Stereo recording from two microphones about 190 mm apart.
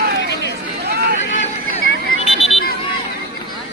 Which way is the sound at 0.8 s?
55° right (ahead or behind).